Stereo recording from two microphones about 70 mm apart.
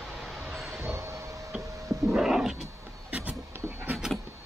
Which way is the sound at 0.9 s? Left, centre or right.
Right.